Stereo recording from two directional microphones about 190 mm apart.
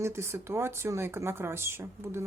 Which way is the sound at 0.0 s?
15° right (ahead or behind).